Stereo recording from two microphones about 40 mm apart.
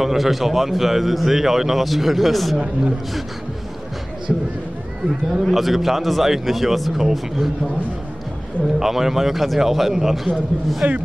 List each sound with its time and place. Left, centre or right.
0.0 s a man's voice: centre
4.3 s a sound: centre
5.3 s a man's voice: centre
7.0 s a man's voice: centre
8.7 s a man's voice: centre
10.8 s speech: right